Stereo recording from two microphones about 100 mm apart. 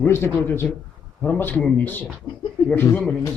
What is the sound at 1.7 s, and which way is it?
Speech, 20° left (ahead or behind).